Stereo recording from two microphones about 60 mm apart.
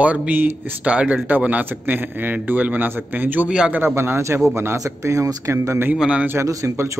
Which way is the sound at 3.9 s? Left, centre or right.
Right.